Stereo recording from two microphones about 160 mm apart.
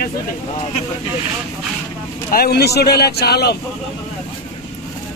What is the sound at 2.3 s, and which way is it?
Speech, 75° left (ahead or behind).